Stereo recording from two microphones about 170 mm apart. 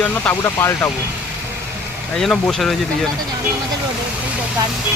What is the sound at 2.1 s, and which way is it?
Speech, centre (ahead or behind).